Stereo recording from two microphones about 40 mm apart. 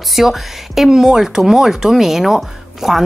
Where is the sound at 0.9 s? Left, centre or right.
Centre.